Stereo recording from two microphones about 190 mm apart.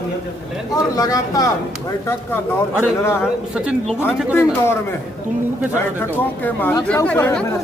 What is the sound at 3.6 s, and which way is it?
Speech, 5° right (ahead or behind).